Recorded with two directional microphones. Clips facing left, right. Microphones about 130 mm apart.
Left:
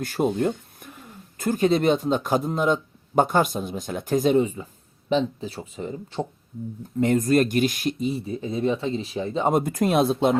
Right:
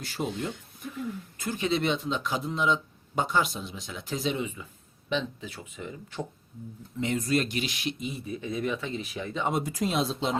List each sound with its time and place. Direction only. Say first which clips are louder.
0.0 s speech: left 9 dB; 50° left (ahead or behind); by 6.2 s 30° left (ahead or behind)
7.0 s speech: left 8 dB; 50° left (ahead or behind); by 9.5 s 30° left (ahead or behind)
9.5 s speech: left 8 dB; 50° left (ahead or behind)